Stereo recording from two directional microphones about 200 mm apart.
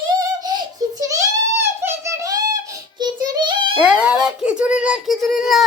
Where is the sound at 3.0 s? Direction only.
20° right (ahead or behind).